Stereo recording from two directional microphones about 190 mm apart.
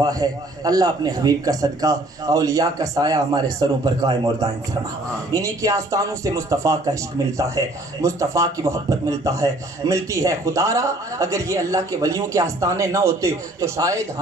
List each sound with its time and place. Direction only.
0.0 s a man's voice: 20° right (ahead or behind)